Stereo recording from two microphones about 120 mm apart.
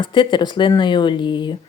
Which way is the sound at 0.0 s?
40° left (ahead or behind).